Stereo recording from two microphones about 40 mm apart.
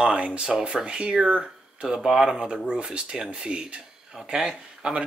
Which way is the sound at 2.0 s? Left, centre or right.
Centre.